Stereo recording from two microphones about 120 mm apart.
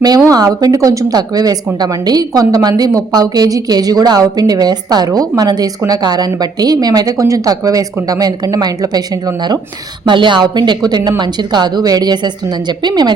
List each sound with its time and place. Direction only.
0.3 s a woman's voice: 30° right (ahead or behind)